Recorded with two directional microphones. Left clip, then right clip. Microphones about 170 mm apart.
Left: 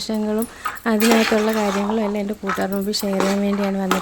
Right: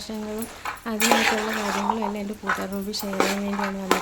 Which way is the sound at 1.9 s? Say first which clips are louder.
Left 6 dB; 40° left (ahead or behind).